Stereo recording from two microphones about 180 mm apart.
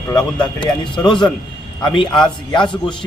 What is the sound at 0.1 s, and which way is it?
Speech, 25° left (ahead or behind).